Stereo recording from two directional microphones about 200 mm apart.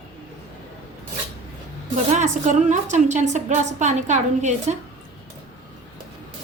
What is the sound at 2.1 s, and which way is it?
A woman's voice, 35° right (ahead or behind).